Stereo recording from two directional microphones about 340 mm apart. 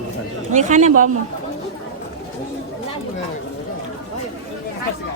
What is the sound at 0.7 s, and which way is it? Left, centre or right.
Speech, right.